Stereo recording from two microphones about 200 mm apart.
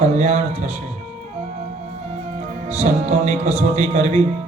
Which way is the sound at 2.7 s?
30° right (ahead or behind).